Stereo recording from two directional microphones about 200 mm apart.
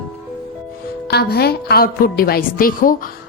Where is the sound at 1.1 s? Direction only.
55° left (ahead or behind).